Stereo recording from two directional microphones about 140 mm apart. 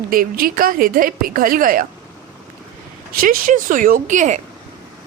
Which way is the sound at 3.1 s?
80° right.